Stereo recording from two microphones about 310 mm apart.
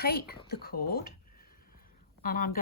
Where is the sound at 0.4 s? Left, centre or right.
Left.